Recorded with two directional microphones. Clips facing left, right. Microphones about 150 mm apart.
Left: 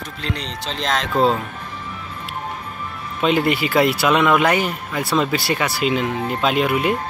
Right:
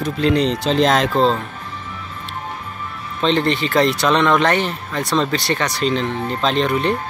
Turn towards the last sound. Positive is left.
turn(degrees=10)  # may be behind; listen again after turning